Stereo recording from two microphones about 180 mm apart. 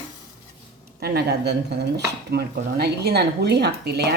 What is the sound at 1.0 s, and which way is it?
Speech, 60° right (ahead or behind).